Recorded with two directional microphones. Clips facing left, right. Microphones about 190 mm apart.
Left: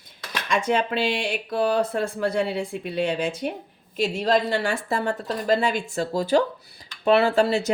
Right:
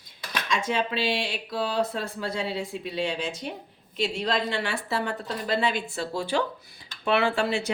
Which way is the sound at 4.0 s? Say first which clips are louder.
Left 5 dB; 40° left (ahead or behind).